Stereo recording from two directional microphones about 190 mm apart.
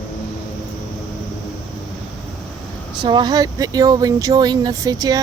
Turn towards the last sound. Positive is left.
turn(degrees=-20)  # may be behind; listen again after turning